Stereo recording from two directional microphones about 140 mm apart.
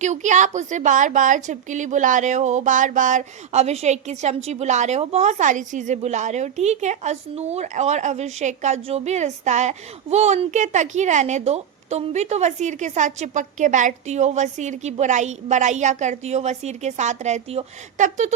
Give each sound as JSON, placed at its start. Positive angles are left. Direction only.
{"t": 0.0, "sound": "a woman's voice", "side_deg": -60}